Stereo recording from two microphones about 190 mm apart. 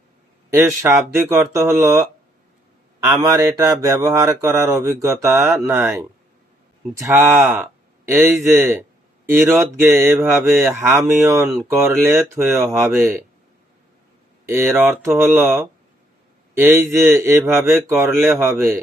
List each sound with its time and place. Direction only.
0.5 s speech: 15° right (ahead or behind)
9.8 s speech: 10° right (ahead or behind)
14.4 s speech: 15° right (ahead or behind)